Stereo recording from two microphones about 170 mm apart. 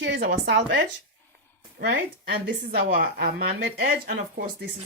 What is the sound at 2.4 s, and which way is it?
A woman's voice, 60° right (ahead or behind).